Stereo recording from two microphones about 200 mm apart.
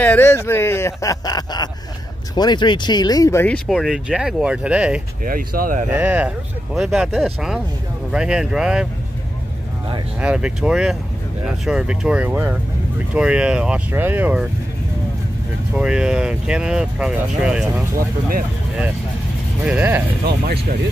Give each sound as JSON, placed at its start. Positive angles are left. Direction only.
{"t": 0.0, "sound": "speech", "side_deg": 10}
{"t": 5.2, "sound": "speech", "side_deg": -45}
{"t": 5.9, "sound": "speech", "side_deg": -10}
{"t": 10.2, "sound": "speech", "side_deg": -5}
{"t": 15.7, "sound": "speech", "side_deg": -5}
{"t": 19.6, "sound": "speech", "side_deg": -5}